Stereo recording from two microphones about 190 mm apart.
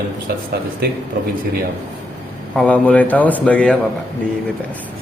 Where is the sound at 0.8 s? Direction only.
55° right (ahead or behind).